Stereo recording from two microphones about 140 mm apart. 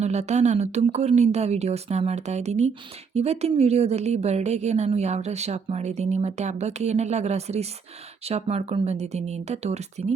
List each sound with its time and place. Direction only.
0.0 s a woman's voice: 50° right (ahead or behind)